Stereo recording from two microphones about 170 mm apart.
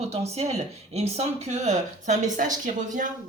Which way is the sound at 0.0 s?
40° right (ahead or behind).